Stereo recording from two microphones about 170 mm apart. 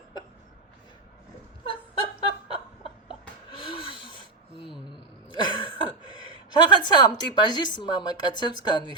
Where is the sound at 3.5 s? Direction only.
30° left (ahead or behind).